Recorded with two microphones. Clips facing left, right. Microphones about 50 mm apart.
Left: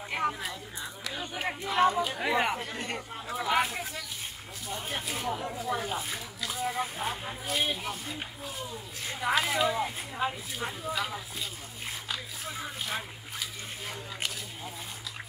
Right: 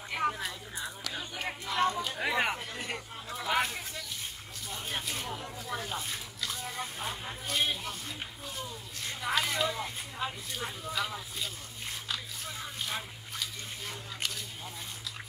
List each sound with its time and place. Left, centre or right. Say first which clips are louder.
0.2 s a sound: even; centre
1.3 s speech: left 5 dB; centre
5.3 s speech: left 6 dB; centre